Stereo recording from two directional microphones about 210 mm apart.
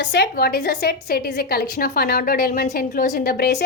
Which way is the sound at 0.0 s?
55° left (ahead or behind).